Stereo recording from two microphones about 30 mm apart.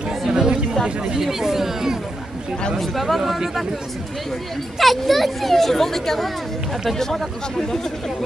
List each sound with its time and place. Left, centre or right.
0.3 s chatter: right
0.8 s speech: right
1.2 s speech: centre
2.8 s speech: centre
4.7 s speech: centre